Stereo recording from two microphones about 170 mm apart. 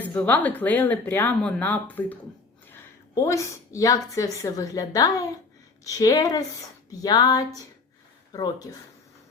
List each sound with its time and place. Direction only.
0.1 s speech: 10° left (ahead or behind)
3.2 s a woman's voice: 20° left (ahead or behind)